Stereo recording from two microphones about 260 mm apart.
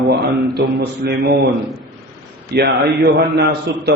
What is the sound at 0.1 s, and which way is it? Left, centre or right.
A man's voice, right.